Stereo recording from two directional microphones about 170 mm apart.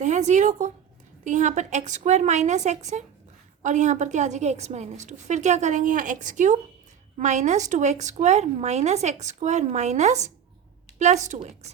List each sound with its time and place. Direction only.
0.0 s a woman's voice: 45° right (ahead or behind)